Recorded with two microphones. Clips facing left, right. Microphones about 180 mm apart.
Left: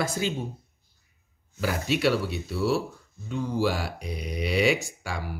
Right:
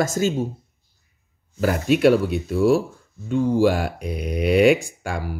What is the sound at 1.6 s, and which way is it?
Speech, 50° right (ahead or behind).